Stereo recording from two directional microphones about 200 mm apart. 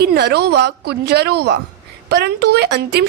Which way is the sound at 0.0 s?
55° right (ahead or behind).